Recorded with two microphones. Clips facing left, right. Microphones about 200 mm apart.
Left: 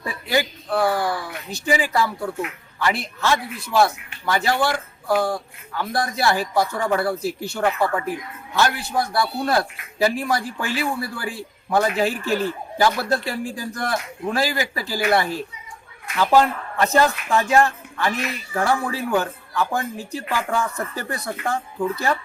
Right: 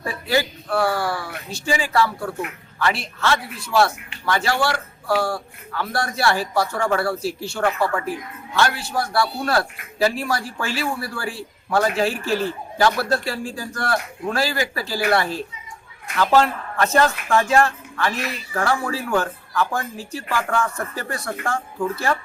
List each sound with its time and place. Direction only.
0.0 s a man's voice: 20° left (ahead or behind)